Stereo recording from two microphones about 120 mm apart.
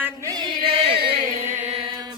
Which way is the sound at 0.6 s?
50° right (ahead or behind).